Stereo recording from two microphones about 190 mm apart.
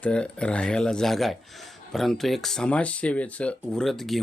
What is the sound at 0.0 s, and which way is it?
Speech, 5° left (ahead or behind).